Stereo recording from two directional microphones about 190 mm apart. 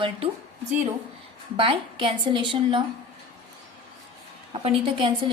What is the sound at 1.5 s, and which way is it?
A woman's voice, 25° right (ahead or behind).